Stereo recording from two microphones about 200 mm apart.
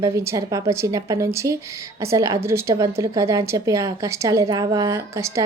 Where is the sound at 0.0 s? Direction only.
15° right (ahead or behind).